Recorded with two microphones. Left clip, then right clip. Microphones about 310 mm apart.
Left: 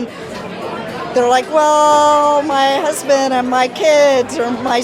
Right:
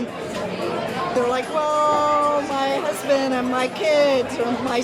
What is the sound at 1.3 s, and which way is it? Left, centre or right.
A woman's voice, left.